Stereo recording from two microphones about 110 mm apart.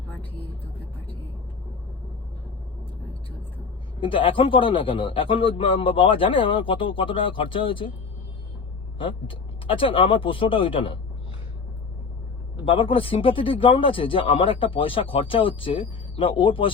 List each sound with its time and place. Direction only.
0.2 s vehicle: 60° left (ahead or behind)
4.0 s speech: 55° left (ahead or behind)
9.0 s speech: 50° left (ahead or behind)
12.6 s speech: 55° left (ahead or behind)